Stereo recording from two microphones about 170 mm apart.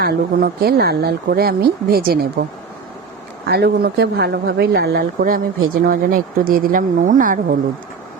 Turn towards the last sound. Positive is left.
turn(degrees=-50)  # may be behind; listen again after turning